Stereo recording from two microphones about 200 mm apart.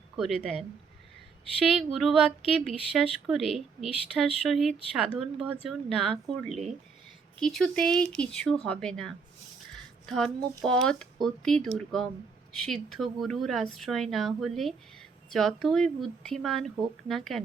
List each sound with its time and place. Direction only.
0.2 s a woman's voice: centre (ahead or behind)
1.7 s a woman's voice: centre (ahead or behind)
9.7 s music: 5° left (ahead or behind)
10.6 s a woman's voice: 5° left (ahead or behind)